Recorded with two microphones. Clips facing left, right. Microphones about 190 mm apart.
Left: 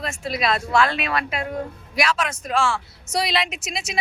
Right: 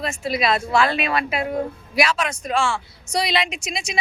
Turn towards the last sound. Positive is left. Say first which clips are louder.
# right 1 dB
turn(degrees=5)  # may be behind; listen again after turning